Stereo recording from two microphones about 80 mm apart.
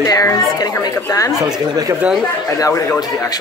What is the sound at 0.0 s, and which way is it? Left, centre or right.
A woman's voice, left.